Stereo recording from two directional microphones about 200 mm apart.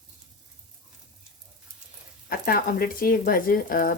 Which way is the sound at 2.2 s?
45° left (ahead or behind).